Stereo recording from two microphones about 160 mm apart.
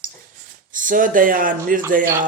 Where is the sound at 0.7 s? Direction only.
55° right (ahead or behind).